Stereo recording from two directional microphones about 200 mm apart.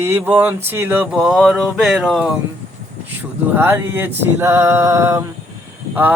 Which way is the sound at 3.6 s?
10° right (ahead or behind).